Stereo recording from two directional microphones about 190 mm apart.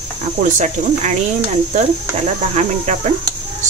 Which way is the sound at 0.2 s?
40° right (ahead or behind).